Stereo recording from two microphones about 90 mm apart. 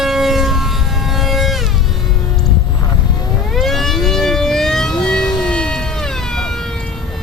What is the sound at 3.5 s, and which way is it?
Civil defense siren, centre (ahead or behind).